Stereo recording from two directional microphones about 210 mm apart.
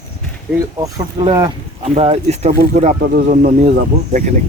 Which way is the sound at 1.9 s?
30° right (ahead or behind).